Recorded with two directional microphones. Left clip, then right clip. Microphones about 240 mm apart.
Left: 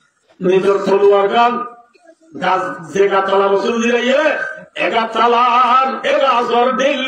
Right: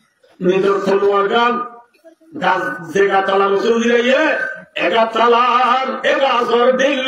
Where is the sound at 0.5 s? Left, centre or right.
Right.